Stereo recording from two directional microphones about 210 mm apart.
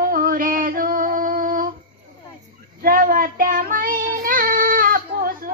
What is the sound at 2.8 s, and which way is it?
Child singing, 40° right (ahead or behind).